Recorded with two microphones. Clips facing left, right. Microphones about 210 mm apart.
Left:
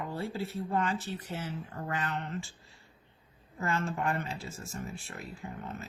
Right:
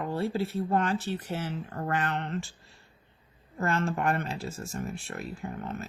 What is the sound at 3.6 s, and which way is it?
Speech, 70° right (ahead or behind).